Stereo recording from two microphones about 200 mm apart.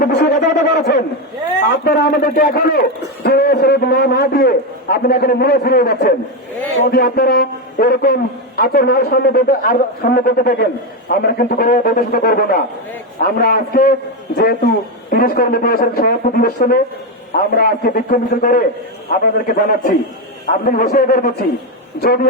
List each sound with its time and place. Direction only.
0.0 s a man's voice: 55° left (ahead or behind)